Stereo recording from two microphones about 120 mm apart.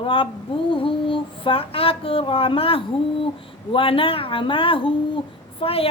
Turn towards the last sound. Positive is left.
turn(degrees=50)  # may be behind; listen again after turning